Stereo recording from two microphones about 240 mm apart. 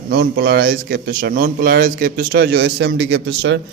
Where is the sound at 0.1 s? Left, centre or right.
Right.